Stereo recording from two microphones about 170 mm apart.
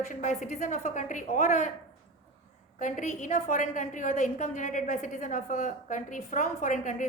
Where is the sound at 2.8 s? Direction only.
50° left (ahead or behind).